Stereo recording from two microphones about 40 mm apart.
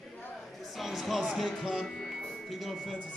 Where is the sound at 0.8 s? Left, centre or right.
Centre.